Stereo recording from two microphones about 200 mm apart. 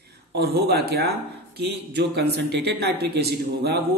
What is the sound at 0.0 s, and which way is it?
Speech, 55° right (ahead or behind).